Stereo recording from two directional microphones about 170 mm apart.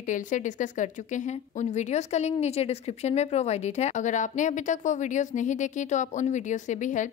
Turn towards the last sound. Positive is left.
turn(degrees=45)  # may be behind; listen again after turning